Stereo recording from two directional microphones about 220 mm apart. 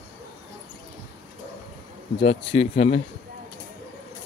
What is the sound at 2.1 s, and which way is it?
Speech, 25° left (ahead or behind).